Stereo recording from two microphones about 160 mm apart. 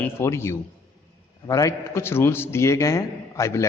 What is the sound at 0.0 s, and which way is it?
A man's voice, 15° left (ahead or behind).